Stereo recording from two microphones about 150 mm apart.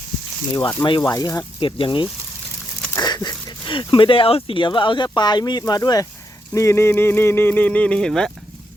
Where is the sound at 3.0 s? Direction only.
25° left (ahead or behind).